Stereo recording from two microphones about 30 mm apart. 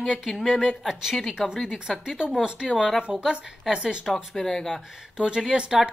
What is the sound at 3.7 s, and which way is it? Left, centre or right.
Speech, centre.